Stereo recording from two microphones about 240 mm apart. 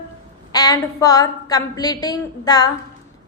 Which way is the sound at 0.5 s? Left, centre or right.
Centre.